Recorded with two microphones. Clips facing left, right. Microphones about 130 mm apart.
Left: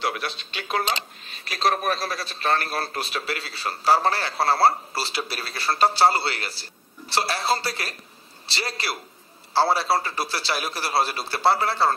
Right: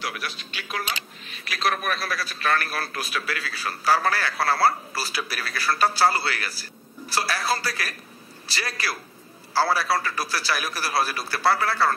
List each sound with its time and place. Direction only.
0.0 s speech: 30° left (ahead or behind)